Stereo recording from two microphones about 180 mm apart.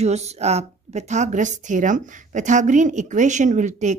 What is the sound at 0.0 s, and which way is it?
Speech, 35° right (ahead or behind).